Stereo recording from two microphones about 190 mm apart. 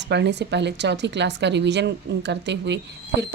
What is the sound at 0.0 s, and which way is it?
Speech, 65° right (ahead or behind).